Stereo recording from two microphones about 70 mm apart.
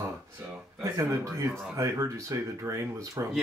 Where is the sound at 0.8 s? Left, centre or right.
Right.